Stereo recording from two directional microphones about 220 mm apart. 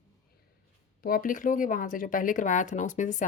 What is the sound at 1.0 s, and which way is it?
A woman's voice, 40° left (ahead or behind).